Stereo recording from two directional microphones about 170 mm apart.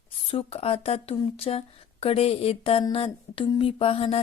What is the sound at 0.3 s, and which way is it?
Speech, 35° left (ahead or behind).